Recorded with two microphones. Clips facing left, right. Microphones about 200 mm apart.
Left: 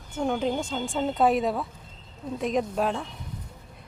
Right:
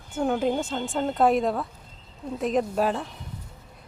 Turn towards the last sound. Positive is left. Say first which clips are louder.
# right 2 dB
turn(degrees=-5)  # may be behind; listen again after turning